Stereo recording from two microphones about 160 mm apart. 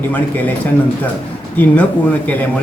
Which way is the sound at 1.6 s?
10° left (ahead or behind).